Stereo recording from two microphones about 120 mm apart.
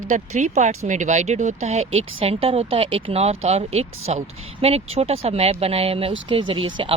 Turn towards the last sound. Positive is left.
turn(degrees=-45)  # may be behind; listen again after turning